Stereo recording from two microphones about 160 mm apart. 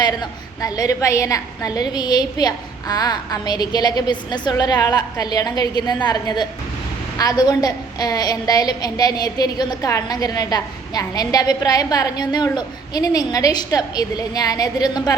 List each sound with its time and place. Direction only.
0.0 s a woman's voice: 25° left (ahead or behind)